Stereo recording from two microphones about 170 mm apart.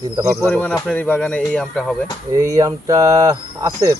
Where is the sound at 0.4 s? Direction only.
10° left (ahead or behind).